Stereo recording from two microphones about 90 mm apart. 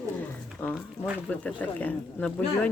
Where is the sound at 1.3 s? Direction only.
15° left (ahead or behind).